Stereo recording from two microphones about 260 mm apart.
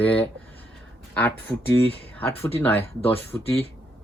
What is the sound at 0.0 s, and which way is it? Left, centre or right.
Speech, centre.